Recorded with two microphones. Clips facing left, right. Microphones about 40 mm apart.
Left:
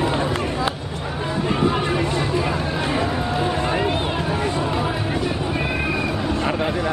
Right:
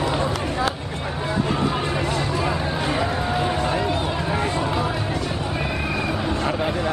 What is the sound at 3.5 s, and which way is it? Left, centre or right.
Run, centre.